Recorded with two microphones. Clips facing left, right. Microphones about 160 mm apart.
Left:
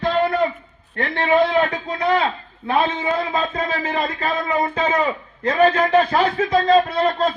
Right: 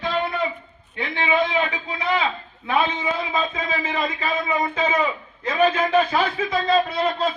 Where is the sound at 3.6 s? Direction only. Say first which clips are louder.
Left 3 dB; 50° left (ahead or behind).